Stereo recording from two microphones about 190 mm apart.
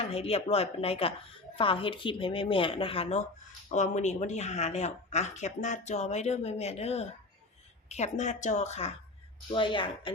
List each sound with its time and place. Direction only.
0.0 s speech: 30° left (ahead or behind)
9.5 s speech: 25° left (ahead or behind)